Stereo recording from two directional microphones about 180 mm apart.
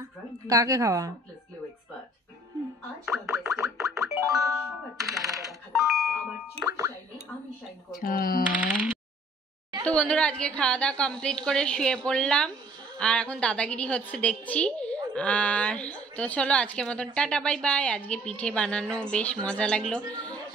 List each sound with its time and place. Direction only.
0.5 s speech: 20° right (ahead or behind)
3.1 s gargling: centre (ahead or behind)
3.7 s music: centre (ahead or behind)
8.0 s speech: 55° left (ahead or behind)
9.8 s a woman's voice: 5° left (ahead or behind)
20.0 s speech: 20° right (ahead or behind)